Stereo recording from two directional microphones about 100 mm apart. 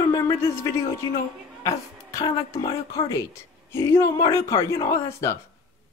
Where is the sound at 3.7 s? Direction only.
30° left (ahead or behind).